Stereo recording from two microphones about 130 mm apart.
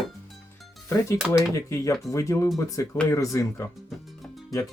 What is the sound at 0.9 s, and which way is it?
Speech, 20° left (ahead or behind).